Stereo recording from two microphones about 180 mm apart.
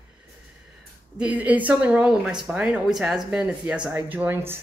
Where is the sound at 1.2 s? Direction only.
5° right (ahead or behind).